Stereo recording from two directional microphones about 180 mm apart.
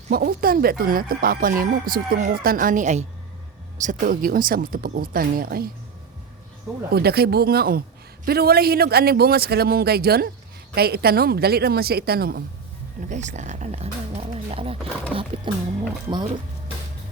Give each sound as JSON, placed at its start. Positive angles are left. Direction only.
{"t": 0.1, "sound": "speech", "side_deg": -55}
{"t": 6.9, "sound": "a man's voice", "side_deg": -60}
{"t": 13.0, "sound": "speech", "side_deg": -40}